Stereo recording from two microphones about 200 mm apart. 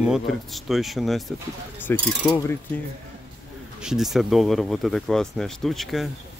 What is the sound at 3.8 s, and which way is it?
Speech, centre (ahead or behind).